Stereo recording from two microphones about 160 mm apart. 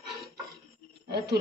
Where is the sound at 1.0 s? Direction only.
90° right.